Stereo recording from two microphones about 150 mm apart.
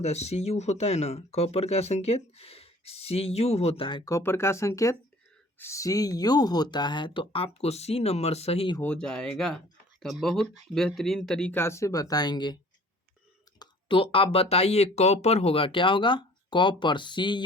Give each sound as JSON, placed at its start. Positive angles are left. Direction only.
{"t": 0.0, "sound": "speech", "side_deg": 45}
{"t": 4.1, "sound": "speech", "side_deg": 15}
{"t": 8.8, "sound": "speech", "side_deg": 10}
{"t": 11.5, "sound": "speech", "side_deg": 15}
{"t": 13.6, "sound": "speech", "side_deg": 35}